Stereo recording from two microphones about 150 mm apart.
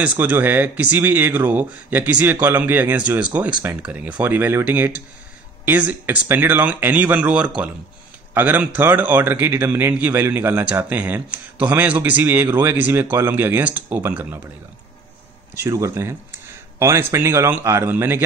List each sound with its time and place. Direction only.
0.0 s a man's voice: 10° right (ahead or behind)
15.6 s a man's voice: 20° right (ahead or behind)